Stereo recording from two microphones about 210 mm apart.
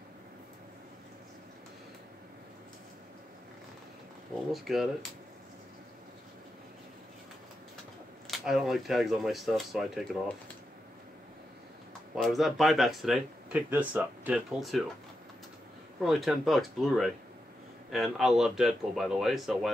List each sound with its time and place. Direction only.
4.5 s speech: centre (ahead or behind)
8.3 s speech: centre (ahead or behind)
12.2 s speech: centre (ahead or behind)
16.0 s speech: centre (ahead or behind)